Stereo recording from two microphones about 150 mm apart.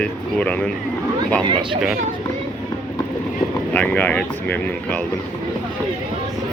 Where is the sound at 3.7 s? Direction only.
10° left (ahead or behind).